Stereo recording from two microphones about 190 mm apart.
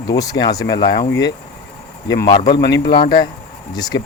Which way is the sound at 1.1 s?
70° left (ahead or behind).